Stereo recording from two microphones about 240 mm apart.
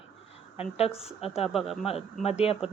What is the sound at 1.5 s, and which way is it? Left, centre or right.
Speech, centre.